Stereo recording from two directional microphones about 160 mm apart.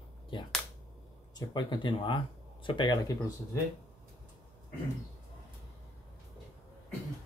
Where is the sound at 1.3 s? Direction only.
30° left (ahead or behind).